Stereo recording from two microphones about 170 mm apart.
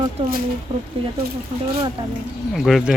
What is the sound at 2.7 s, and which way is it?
Speech, centre (ahead or behind).